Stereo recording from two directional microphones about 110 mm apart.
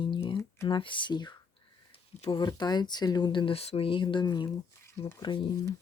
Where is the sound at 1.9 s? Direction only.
55° left (ahead or behind).